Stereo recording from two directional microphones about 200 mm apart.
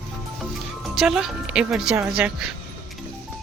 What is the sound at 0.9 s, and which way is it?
Speech, centre (ahead or behind).